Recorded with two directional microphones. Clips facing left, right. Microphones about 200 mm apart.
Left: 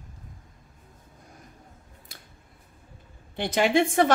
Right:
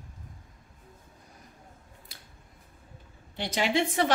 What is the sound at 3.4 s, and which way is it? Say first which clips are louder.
Speech: left 5 dB; 55° left (ahead or behind).